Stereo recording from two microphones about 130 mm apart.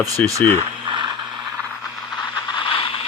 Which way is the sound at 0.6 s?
35° right (ahead or behind).